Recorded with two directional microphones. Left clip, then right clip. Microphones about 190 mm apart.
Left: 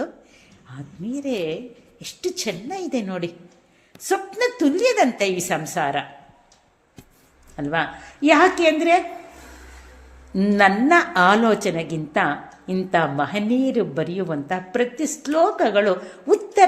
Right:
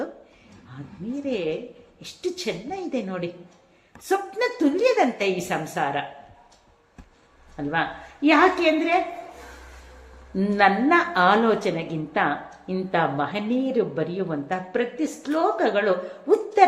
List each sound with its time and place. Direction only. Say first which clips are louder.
1.2 s a woman's voice: left 1 dB; 35° left (ahead or behind)
7.5 s a woman's voice: left 2 dB; 35° left (ahead or behind)
10.3 s a woman's voice: left 2 dB; 35° left (ahead or behind)